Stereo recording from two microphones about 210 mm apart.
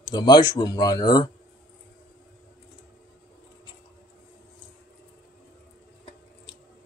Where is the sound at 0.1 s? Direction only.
20° left (ahead or behind).